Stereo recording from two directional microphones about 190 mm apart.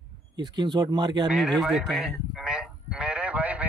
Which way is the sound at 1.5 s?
Centre (ahead or behind).